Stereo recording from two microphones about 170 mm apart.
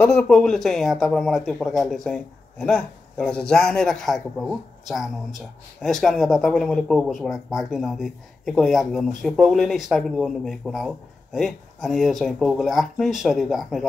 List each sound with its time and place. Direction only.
0.0 s speech: 5° left (ahead or behind)